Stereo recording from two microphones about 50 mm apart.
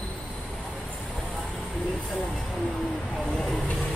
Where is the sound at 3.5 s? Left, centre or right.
Left.